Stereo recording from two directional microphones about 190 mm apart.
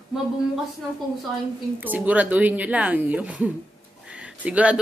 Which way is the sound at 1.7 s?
10° right (ahead or behind).